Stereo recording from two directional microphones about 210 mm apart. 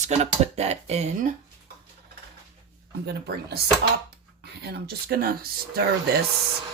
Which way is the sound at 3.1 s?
50° right (ahead or behind).